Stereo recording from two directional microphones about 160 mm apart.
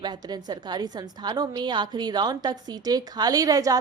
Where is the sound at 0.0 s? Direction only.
25° right (ahead or behind).